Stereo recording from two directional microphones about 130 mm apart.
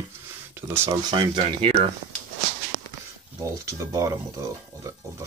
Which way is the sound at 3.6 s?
25° right (ahead or behind).